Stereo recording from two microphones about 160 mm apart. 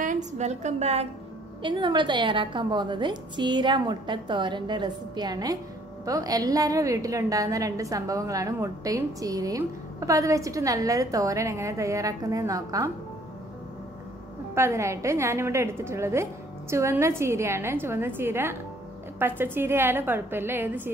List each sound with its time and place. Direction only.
0.0 s a woman's voice: 50° right (ahead or behind)
1.6 s a woman's voice: 30° right (ahead or behind)
14.5 s a woman's voice: 15° right (ahead or behind)